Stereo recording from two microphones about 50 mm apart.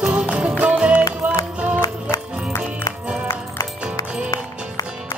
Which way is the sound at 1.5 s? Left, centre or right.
Right.